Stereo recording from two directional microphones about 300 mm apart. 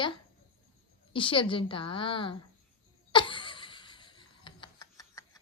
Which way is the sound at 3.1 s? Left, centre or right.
Centre.